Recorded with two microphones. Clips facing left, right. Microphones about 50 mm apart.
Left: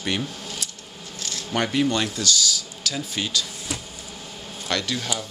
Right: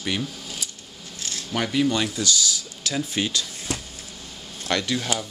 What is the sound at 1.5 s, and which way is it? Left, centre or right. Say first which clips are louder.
Speech: left 1 dB; centre.